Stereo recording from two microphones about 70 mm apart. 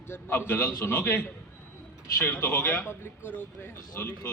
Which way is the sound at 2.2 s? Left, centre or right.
Left.